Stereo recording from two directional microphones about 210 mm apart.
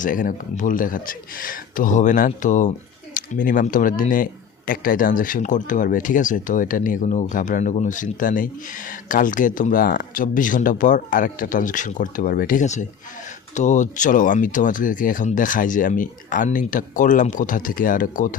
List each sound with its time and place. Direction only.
0.0 s speech: 40° left (ahead or behind)